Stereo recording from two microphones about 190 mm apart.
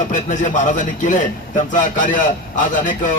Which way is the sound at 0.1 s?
45° left (ahead or behind).